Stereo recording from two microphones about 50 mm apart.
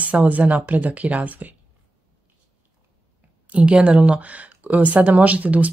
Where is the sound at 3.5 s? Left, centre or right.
Right.